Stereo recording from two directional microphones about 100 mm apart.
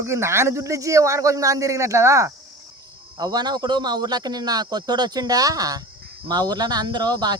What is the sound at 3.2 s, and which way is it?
Speech, 40° right (ahead or behind).